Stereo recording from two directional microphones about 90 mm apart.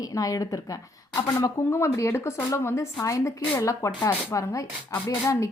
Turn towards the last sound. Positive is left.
turn(degrees=35)  # may be behind; listen again after turning